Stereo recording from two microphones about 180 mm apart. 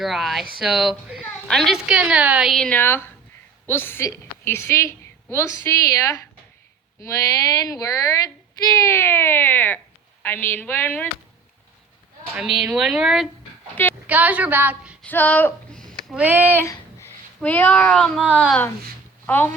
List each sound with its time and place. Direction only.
0.0 s a woman's voice: centre (ahead or behind)
12.5 s a woman's voice: centre (ahead or behind)
15.0 s speech: 10° left (ahead or behind)
16.1 s a woman's voice: 10° right (ahead or behind)
16.5 s a woman's voice: 10° left (ahead or behind)